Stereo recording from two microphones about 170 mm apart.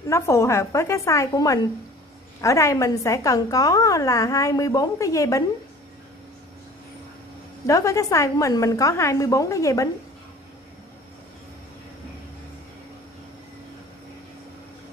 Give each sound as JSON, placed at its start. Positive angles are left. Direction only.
{"t": 0.1, "sound": "a woman's voice", "side_deg": 15}
{"t": 7.6, "sound": "a woman's voice", "side_deg": 20}